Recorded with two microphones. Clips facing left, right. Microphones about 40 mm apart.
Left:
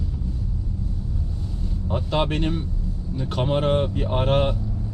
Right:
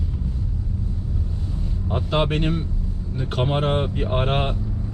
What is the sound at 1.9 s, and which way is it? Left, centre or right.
Speech, right.